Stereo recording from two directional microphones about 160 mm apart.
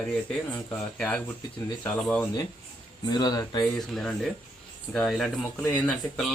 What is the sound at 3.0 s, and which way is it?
Speech, 25° left (ahead or behind).